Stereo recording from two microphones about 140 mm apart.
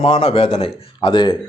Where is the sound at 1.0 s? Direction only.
35° left (ahead or behind).